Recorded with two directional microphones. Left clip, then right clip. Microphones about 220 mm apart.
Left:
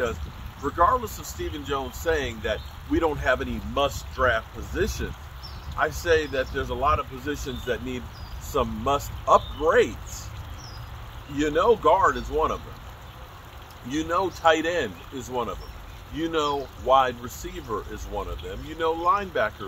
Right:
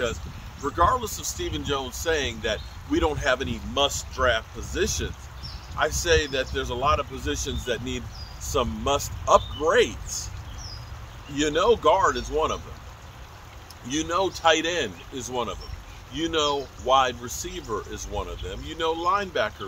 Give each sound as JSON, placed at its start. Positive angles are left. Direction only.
{"t": 0.7, "sound": "speech", "side_deg": -20}
{"t": 11.3, "sound": "speech", "side_deg": -15}
{"t": 13.8, "sound": "speech", "side_deg": -15}